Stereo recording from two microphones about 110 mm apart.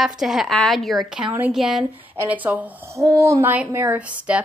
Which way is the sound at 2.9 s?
25° right (ahead or behind).